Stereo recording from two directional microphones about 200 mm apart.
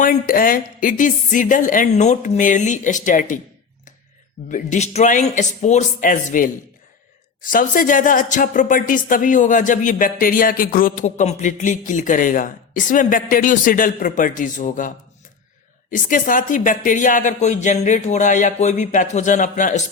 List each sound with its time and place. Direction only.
0.0 s speech: 45° left (ahead or behind)
4.4 s speech: 40° left (ahead or behind)